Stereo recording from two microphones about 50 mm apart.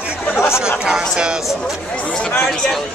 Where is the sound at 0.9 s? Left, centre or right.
Centre.